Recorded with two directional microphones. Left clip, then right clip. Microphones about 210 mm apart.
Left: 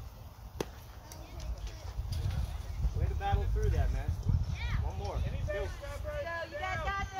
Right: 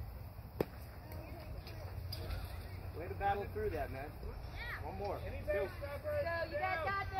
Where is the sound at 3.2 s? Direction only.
45° right (ahead or behind).